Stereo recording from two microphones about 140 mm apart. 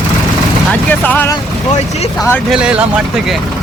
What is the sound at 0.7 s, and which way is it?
Vehicle, 10° left (ahead or behind).